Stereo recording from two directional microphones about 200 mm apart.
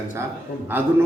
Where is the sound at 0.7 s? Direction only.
10° right (ahead or behind).